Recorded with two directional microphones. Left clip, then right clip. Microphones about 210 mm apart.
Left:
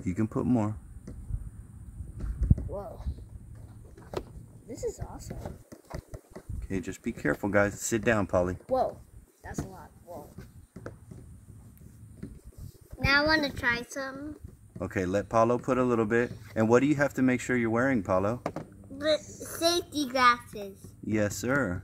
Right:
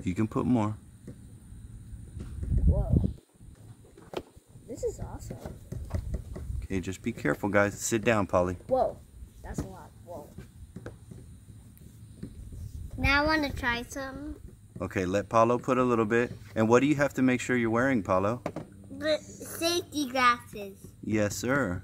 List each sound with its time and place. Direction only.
0.0 s speech: centre (ahead or behind)
5.1 s a sound: centre (ahead or behind)
6.7 s speech: centre (ahead or behind)
9.4 s a sound: 5° left (ahead or behind)
13.0 s a woman's voice: 15° right (ahead or behind)
14.8 s speech: centre (ahead or behind)
18.9 s a sound: 10° right (ahead or behind)
19.8 s a woman's voice: 15° right (ahead or behind)
20.3 s a child's voice: 30° right (ahead or behind)
21.1 s speech: centre (ahead or behind)